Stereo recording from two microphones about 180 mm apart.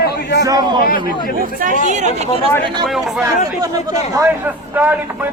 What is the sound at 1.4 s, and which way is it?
Speech, 50° right (ahead or behind).